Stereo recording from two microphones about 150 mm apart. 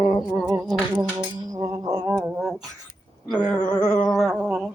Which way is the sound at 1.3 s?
25° right (ahead or behind).